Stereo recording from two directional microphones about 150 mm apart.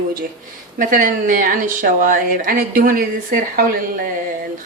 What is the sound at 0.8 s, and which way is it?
Speech, 70° right (ahead or behind).